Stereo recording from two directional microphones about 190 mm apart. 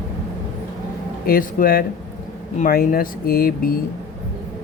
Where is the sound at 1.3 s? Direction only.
50° left (ahead or behind).